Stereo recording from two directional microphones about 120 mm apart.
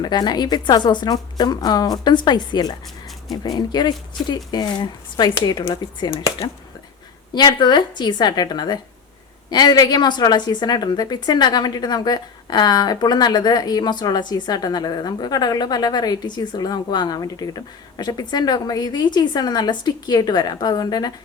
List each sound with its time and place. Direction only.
0.0 s a woman's voice: 35° left (ahead or behind)
6.1 s speech: 25° left (ahead or behind)
7.3 s a woman's voice: 40° left (ahead or behind)